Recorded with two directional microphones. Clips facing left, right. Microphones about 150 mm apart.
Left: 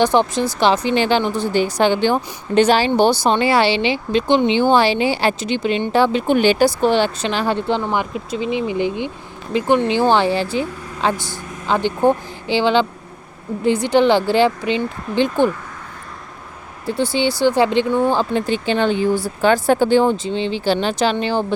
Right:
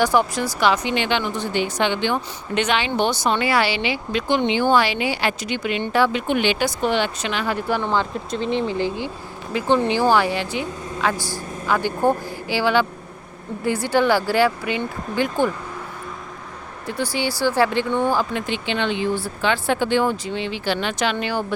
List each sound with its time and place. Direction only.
0.0 s speech: 25° left (ahead or behind)
7.8 s speech: 5° left (ahead or behind); by 15.4 s 25° left (ahead or behind)
16.8 s speech: 25° left (ahead or behind)